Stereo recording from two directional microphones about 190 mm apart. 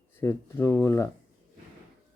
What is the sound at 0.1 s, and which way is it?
Speech, 15° left (ahead or behind).